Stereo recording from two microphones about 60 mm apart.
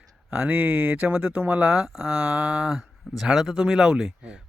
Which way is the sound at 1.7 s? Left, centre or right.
Centre.